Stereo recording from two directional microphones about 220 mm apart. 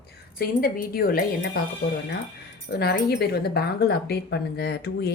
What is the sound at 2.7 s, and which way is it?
Speech, 45° left (ahead or behind).